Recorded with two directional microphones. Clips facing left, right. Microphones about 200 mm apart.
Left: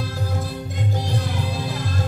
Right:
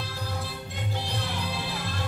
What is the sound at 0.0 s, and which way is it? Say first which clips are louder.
Music: left 7 dB; 45° left (ahead or behind).